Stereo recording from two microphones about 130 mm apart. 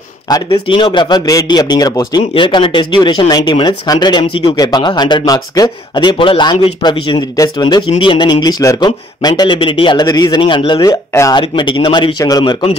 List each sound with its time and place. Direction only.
0.3 s speech: 30° left (ahead or behind)
2.3 s speech: 40° left (ahead or behind)
4.6 s speech: 30° left (ahead or behind)
10.9 s speech: 25° left (ahead or behind)
11.4 s speech: 40° left (ahead or behind)